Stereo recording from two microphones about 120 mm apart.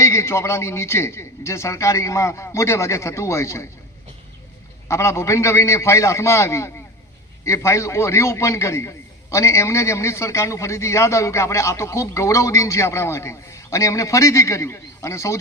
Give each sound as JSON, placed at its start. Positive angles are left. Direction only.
{"t": 0.0, "sound": "a man's voice", "side_deg": 25}
{"t": 4.9, "sound": "a man's voice", "side_deg": 25}